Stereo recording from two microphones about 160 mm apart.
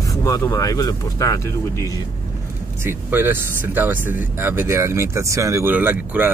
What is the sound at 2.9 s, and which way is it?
Speech, 10° right (ahead or behind).